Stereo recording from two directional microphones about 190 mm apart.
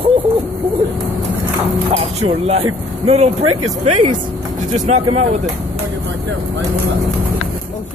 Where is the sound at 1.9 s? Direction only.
30° right (ahead or behind).